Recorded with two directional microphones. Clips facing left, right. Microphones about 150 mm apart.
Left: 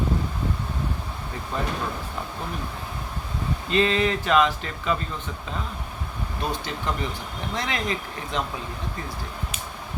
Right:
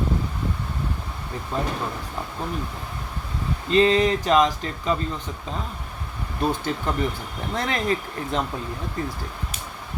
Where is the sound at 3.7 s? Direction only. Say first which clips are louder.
Right 4 dB; 35° right (ahead or behind).